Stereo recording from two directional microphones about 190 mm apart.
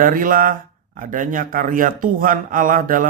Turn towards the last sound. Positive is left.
turn(degrees=-45)  # may be behind; listen again after turning